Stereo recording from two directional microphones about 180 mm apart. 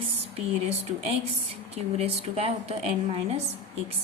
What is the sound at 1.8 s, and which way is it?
A woman's voice, 35° right (ahead or behind).